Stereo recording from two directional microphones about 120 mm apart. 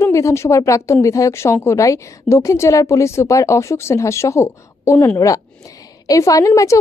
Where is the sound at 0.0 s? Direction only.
25° left (ahead or behind).